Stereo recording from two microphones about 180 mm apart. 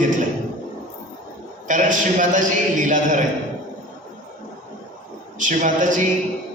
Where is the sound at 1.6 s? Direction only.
45° right (ahead or behind).